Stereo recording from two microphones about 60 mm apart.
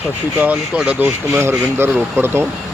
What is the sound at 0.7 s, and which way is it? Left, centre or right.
Speech, centre.